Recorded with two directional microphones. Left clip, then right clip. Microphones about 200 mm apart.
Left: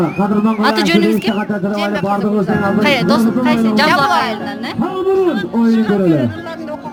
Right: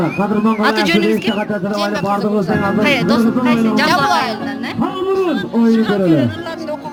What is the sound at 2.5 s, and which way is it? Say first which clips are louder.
Speech: left 1 dB; 50° left (ahead or behind).